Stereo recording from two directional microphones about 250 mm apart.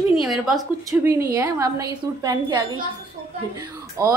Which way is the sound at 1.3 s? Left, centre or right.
Centre.